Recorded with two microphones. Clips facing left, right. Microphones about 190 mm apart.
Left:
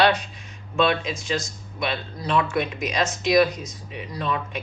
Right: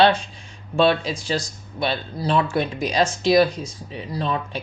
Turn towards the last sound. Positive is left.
turn(degrees=-30)  # may be behind; listen again after turning